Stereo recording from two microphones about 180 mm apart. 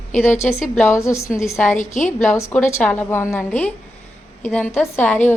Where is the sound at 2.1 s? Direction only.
10° left (ahead or behind).